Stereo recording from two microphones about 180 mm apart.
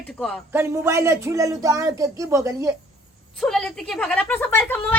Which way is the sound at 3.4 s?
Centre (ahead or behind).